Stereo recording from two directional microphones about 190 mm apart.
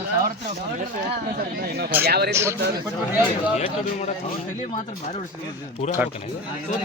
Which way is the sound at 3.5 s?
35° left (ahead or behind).